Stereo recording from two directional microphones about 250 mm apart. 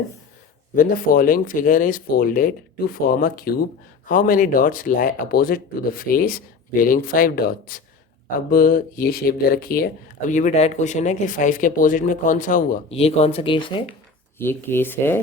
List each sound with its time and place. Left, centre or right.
0.8 s speech: left; by 13.9 s centre
14.3 s speech: centre